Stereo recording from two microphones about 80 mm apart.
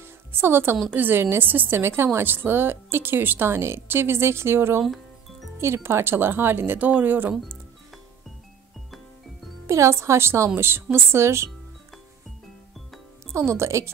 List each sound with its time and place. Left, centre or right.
0.0 s a sound: right
0.8 s speech: right
9.7 s a woman's voice: right
13.3 s a woman's voice: right